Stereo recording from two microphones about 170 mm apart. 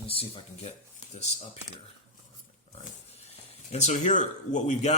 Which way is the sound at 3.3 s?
40° left (ahead or behind).